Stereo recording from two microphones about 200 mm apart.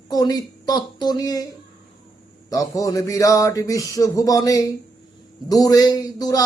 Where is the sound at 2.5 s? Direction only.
15° left (ahead or behind).